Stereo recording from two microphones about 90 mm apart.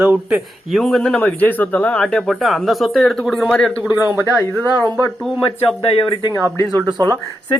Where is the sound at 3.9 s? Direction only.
20° right (ahead or behind).